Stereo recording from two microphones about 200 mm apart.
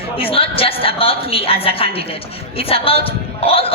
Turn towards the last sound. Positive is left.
turn(degrees=30)  # may be behind; listen again after turning